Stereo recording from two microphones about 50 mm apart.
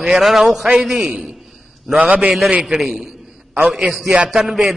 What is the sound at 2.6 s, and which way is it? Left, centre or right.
A man's voice, centre.